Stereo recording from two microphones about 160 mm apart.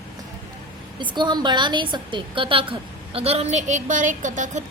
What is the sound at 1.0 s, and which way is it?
A woman's voice, 30° right (ahead or behind).